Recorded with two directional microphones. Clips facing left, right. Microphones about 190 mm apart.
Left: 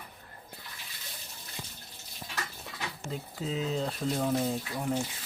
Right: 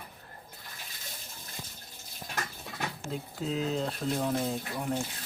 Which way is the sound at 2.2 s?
50° right (ahead or behind).